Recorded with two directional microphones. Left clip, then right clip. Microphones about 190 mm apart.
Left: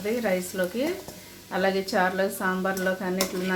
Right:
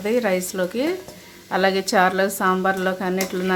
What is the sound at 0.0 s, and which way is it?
Speech, 40° right (ahead or behind).